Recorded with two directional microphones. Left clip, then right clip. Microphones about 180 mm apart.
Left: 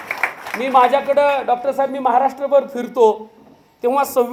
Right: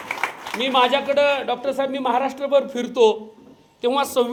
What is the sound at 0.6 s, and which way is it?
A man's voice, 20° right (ahead or behind).